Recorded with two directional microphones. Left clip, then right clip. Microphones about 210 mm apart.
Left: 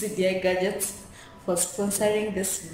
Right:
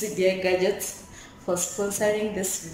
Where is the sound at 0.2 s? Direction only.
Centre (ahead or behind).